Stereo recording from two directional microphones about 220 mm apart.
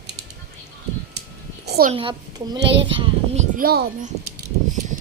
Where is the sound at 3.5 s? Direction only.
45° right (ahead or behind).